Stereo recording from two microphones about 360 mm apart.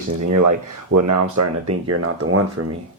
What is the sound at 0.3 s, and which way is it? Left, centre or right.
Speech, right.